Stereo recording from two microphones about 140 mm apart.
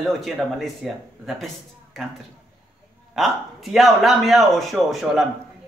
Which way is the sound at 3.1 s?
Centre (ahead or behind).